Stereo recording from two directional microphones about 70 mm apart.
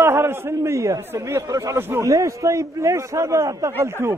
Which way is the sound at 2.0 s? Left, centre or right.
Right.